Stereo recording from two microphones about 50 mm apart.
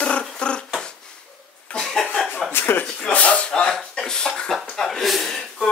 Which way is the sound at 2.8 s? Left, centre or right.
Left.